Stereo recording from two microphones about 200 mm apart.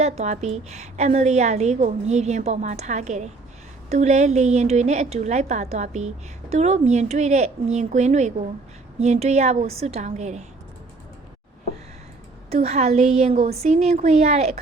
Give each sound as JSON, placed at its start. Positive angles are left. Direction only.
{"t": 0.0, "sound": "a woman's voice", "side_deg": -35}
{"t": 12.5, "sound": "a woman's voice", "side_deg": -30}